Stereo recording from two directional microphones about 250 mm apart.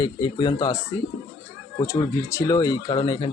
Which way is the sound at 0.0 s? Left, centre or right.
Centre.